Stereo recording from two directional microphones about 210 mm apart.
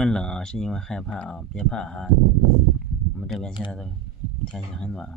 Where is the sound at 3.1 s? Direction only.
Centre (ahead or behind).